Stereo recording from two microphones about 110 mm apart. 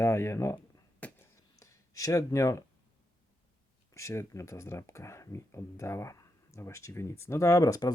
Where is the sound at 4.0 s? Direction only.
25° left (ahead or behind).